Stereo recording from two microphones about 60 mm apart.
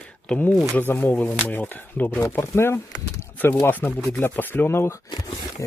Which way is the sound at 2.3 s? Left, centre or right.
Left.